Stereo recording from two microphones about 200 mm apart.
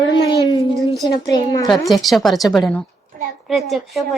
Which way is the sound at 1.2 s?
20° left (ahead or behind).